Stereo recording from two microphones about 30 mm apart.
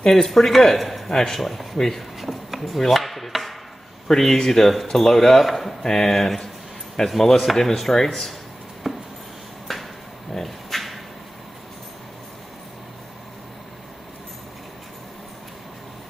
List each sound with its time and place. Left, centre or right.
0.1 s speech: centre
1.1 s speech: centre
1.4 s speech: centre
2.1 s a sound: centre
2.9 s chopping: centre
4.3 s speech: centre
5.8 s speech: centre
8.8 s a sound: centre